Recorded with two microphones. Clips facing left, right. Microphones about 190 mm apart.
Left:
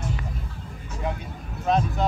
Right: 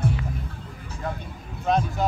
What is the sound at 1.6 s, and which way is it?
Speech, centre (ahead or behind).